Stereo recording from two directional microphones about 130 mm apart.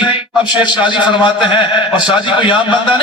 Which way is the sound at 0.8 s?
40° left (ahead or behind).